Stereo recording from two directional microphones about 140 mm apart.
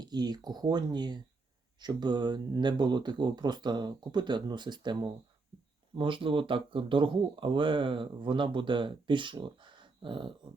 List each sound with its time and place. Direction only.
0.0 s speech: 30° right (ahead or behind)